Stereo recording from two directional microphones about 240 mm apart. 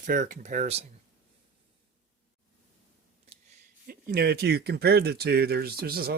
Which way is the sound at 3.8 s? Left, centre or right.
Right.